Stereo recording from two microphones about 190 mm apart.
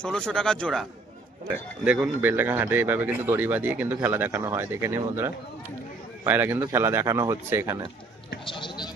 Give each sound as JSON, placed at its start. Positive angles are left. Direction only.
{"t": 0.0, "sound": "speech", "side_deg": 5}
{"t": 1.8, "sound": "speech", "side_deg": -5}
{"t": 8.4, "sound": "a sound", "side_deg": 25}